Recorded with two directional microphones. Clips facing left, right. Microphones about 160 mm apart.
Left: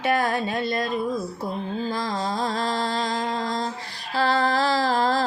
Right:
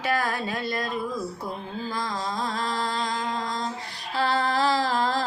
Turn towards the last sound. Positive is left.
turn(degrees=35)  # may be behind; listen again after turning